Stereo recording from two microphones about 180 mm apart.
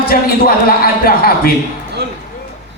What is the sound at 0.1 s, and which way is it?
A man's voice, 55° left (ahead or behind).